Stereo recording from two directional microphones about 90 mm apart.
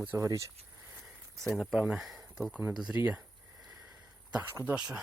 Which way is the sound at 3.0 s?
15° right (ahead or behind).